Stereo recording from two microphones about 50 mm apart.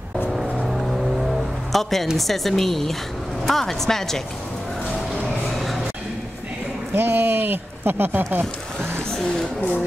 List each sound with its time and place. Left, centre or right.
0.7 s music: centre
2.1 s a woman's voice: centre
5.1 s music: centre
6.9 s speech: right
9.1 s speech: centre